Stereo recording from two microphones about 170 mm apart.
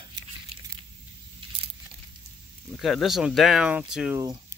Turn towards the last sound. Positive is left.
turn(degrees=-5)  # may be behind; listen again after turning